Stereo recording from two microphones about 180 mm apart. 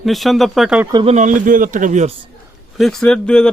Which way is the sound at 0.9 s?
35° right (ahead or behind).